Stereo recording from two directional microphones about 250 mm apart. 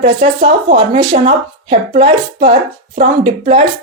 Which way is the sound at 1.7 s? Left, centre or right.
Right.